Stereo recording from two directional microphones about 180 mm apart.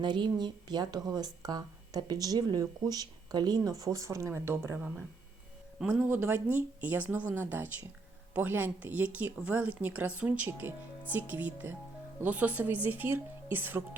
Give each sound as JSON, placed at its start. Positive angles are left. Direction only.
{"t": 0.0, "sound": "speech", "side_deg": -25}